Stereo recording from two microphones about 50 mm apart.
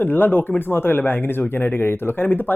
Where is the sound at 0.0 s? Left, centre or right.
Left.